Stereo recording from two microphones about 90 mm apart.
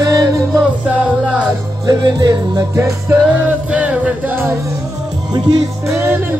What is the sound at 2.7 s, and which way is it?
Music, 30° right (ahead or behind).